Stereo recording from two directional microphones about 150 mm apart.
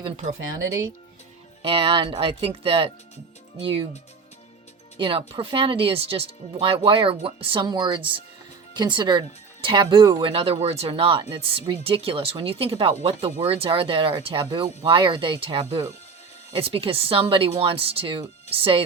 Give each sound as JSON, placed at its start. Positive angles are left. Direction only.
{"t": 1.6, "sound": "speech", "side_deg": -35}
{"t": 4.9, "sound": "speech", "side_deg": -35}